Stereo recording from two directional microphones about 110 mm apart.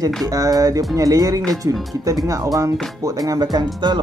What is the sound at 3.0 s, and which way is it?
Speech, 35° right (ahead or behind).